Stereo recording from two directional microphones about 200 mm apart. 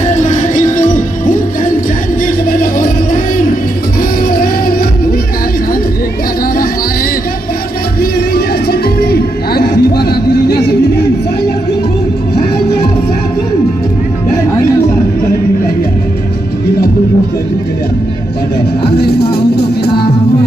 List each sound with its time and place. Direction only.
0.0 s music: 35° left (ahead or behind)
8.0 s music: 50° left (ahead or behind)
18.9 s music: 55° left (ahead or behind)